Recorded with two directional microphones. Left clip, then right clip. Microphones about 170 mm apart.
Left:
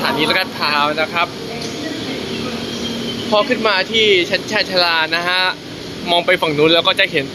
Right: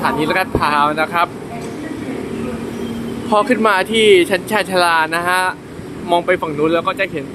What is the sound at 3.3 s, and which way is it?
Speech, 25° right (ahead or behind).